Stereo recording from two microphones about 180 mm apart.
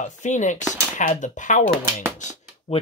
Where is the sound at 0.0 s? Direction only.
45° left (ahead or behind).